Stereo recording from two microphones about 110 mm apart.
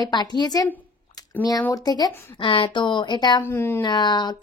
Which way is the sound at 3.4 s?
20° left (ahead or behind).